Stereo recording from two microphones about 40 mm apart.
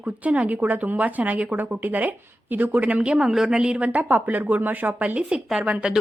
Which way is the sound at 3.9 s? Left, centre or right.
Right.